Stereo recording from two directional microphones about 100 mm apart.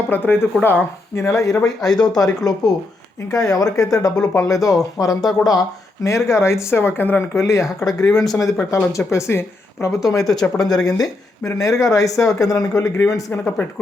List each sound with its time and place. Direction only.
0.1 s speech: 20° left (ahead or behind)